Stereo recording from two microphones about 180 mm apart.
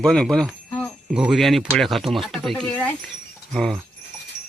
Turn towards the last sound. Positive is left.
turn(degrees=0)  # may be behind; listen again after turning